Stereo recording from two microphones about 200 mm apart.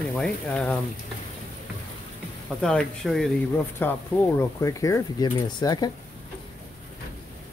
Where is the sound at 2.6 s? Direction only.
5° left (ahead or behind).